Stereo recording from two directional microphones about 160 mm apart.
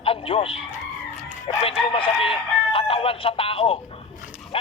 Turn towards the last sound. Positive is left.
turn(degrees=35)  # may be behind; listen again after turning